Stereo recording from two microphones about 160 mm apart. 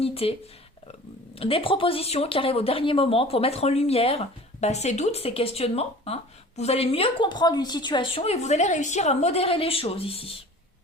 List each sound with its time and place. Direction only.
0.0 s speech: 35° left (ahead or behind)
1.4 s speech: 35° left (ahead or behind)